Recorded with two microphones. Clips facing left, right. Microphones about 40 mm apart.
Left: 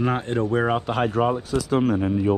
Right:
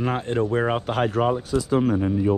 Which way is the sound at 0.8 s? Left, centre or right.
Left.